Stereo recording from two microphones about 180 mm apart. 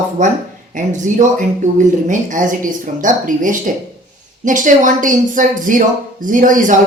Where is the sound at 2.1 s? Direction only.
45° right (ahead or behind).